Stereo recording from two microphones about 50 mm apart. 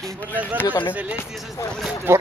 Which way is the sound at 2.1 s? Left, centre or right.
Right.